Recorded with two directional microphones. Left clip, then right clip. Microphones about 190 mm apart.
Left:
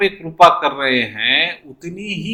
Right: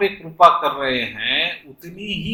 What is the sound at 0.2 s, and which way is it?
Speech, 20° left (ahead or behind).